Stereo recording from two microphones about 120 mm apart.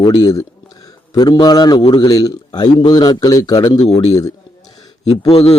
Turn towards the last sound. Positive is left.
turn(degrees=55)  # may be behind; listen again after turning